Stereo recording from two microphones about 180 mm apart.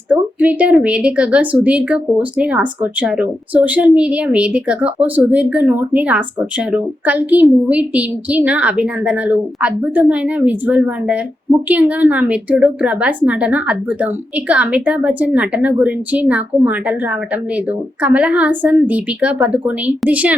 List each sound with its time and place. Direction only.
0.1 s a woman's voice: 5° right (ahead or behind)
18.0 s a woman's voice: 5° right (ahead or behind)